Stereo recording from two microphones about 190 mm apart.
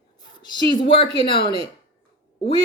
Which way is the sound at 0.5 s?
25° left (ahead or behind).